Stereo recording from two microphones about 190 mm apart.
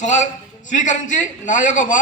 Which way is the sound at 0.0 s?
40° left (ahead or behind).